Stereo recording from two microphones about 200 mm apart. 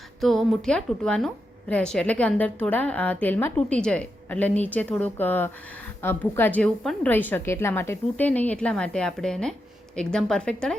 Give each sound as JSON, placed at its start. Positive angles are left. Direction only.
{"t": 0.2, "sound": "a woman's voice", "side_deg": 0}